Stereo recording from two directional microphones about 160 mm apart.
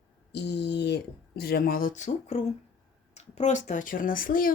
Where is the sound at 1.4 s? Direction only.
75° left (ahead or behind).